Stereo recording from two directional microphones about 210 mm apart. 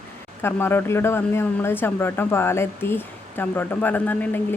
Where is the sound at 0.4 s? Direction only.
10° left (ahead or behind).